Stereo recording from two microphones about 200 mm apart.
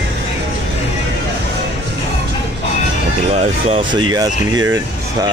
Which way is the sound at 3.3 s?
30° right (ahead or behind).